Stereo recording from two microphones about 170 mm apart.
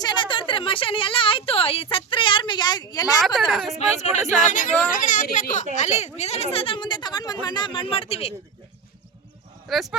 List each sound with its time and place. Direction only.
0.0 s a woman's voice: 25° left (ahead or behind)
3.2 s speech: centre (ahead or behind)
3.8 s a woman's voice: 40° left (ahead or behind)
9.6 s speech: centre (ahead or behind)